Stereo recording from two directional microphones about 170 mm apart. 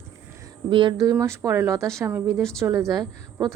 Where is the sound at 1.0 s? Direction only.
15° right (ahead or behind).